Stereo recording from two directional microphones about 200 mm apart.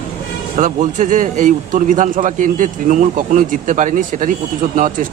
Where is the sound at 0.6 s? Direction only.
40° right (ahead or behind).